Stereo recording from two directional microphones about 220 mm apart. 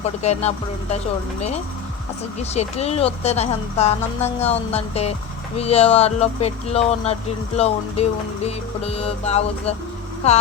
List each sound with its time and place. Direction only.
0.0 s speech: 30° left (ahead or behind)
2.4 s speech: 30° left (ahead or behind)